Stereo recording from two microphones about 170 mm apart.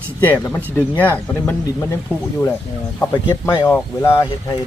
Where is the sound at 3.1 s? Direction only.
25° left (ahead or behind).